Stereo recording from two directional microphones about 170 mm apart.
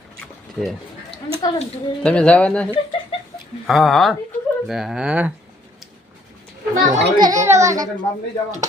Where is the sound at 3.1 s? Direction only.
35° left (ahead or behind).